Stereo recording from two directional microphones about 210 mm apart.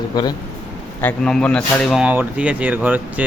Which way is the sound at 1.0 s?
5° left (ahead or behind).